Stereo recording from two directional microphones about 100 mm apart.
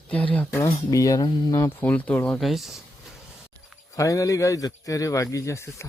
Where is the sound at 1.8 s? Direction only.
15° left (ahead or behind).